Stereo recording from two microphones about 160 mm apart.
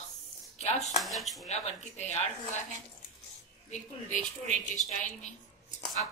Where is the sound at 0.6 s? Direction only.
45° left (ahead or behind).